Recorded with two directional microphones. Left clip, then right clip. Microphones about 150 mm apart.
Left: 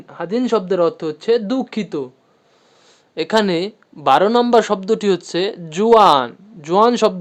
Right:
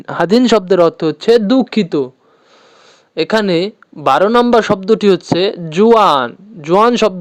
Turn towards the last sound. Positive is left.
turn(degrees=-35)  # may be behind; listen again after turning